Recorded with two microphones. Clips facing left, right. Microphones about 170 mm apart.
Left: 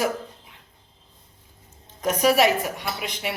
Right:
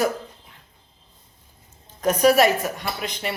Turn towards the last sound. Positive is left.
turn(degrees=10)  # may be behind; listen again after turning